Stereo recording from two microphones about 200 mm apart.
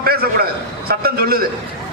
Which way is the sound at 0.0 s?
50° right (ahead or behind).